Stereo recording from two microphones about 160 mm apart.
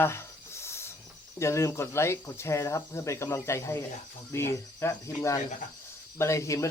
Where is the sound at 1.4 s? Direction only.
20° left (ahead or behind).